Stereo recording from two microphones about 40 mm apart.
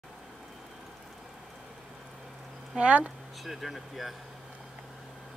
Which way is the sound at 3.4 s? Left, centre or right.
Centre.